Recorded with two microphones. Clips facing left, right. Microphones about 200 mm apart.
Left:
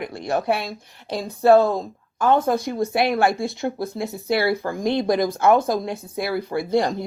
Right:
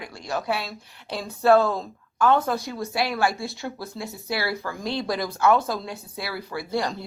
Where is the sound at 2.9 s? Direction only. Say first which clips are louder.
Left 4 dB; 55° left (ahead or behind).